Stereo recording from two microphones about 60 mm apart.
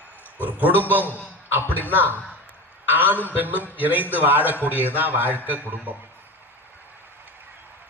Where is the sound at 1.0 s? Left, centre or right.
Left.